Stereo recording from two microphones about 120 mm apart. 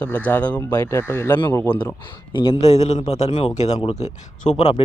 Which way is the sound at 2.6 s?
65° left (ahead or behind).